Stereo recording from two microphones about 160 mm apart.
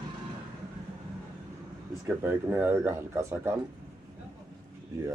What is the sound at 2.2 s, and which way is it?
Speech, 15° right (ahead or behind).